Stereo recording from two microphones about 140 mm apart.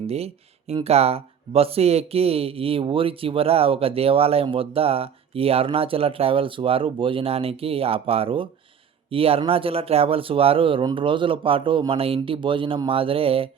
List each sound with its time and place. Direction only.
0.9 s speech: 45° right (ahead or behind)